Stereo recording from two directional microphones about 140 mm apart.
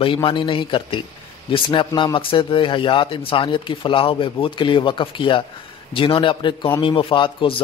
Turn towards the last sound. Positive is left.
turn(degrees=35)  # may be behind; listen again after turning